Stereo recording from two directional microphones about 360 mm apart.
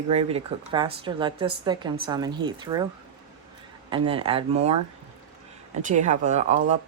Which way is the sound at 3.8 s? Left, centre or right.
Centre.